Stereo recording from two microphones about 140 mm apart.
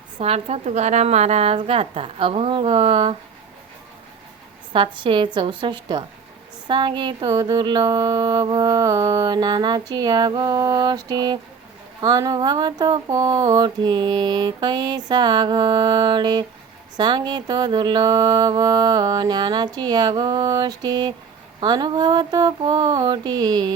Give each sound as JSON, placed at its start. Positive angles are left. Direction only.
{"t": 0.2, "sound": "a woman's voice", "side_deg": -45}
{"t": 4.7, "sound": "music", "side_deg": -35}
{"t": 21.6, "sound": "a sound", "side_deg": -30}